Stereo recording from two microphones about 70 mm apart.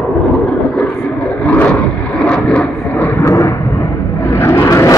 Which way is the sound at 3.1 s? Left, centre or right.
Left.